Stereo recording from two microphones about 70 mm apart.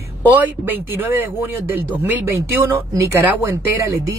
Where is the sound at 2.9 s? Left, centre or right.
Right.